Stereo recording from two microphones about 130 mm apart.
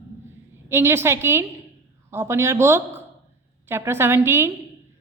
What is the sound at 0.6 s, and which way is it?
A woman's voice, 20° right (ahead or behind).